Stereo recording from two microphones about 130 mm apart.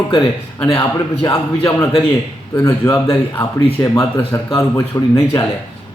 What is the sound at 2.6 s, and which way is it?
Speech, 20° left (ahead or behind).